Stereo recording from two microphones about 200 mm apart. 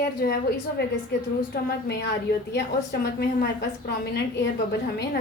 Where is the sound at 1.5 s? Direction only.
50° left (ahead or behind).